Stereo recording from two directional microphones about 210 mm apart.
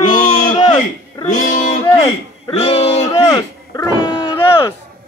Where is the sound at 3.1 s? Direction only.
15° left (ahead or behind).